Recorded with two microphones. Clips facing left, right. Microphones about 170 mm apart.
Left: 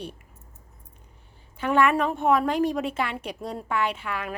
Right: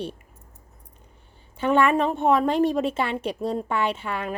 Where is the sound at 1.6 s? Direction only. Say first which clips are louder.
Right 2 dB; 30° right (ahead or behind).